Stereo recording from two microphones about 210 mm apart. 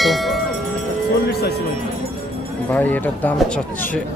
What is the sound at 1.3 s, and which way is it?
Speech, 50° left (ahead or behind).